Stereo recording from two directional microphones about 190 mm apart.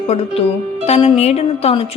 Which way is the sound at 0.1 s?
35° left (ahead or behind).